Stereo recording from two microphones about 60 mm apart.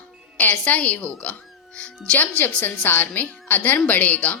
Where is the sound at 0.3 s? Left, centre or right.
Left.